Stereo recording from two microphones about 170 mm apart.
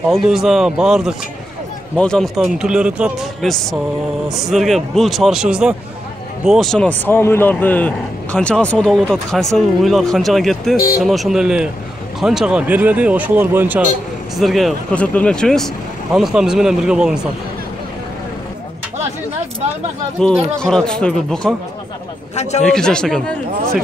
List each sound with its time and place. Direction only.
0.1 s speech: centre (ahead or behind)
14.3 s speech: centre (ahead or behind)
20.2 s speech: centre (ahead or behind)
22.3 s a man's voice: 40° left (ahead or behind)
22.7 s speech: 5° left (ahead or behind)